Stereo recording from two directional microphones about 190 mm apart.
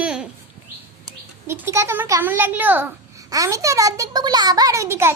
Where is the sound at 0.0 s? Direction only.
5° right (ahead or behind).